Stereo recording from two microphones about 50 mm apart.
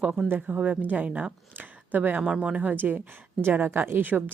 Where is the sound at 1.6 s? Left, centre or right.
Right.